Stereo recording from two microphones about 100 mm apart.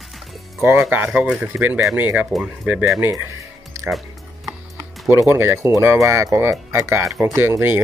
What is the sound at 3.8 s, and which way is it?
Music, centre (ahead or behind).